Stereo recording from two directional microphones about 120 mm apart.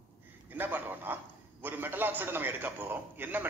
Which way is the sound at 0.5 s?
15° right (ahead or behind).